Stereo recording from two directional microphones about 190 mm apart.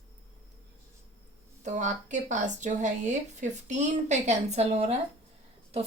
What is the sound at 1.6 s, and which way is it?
Speech, 40° right (ahead or behind).